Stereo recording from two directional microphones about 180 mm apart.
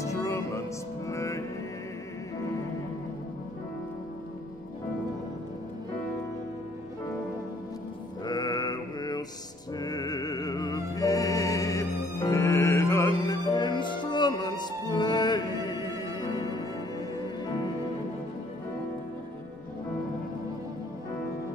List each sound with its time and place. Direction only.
0.0 s music: 15° left (ahead or behind)
8.3 s mantra: 20° left (ahead or behind)
9.8 s music: 20° left (ahead or behind)